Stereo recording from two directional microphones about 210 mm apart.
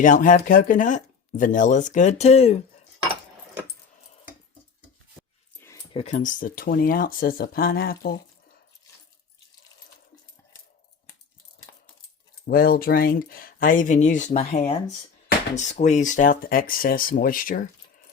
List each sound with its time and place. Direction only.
0.0 s speech: 40° left (ahead or behind)
5.5 s dog: 10° left (ahead or behind)
5.9 s speech: 30° left (ahead or behind)
12.5 s speech: 45° left (ahead or behind)